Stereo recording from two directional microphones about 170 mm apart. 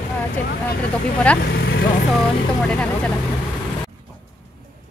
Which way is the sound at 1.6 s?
65° left (ahead or behind).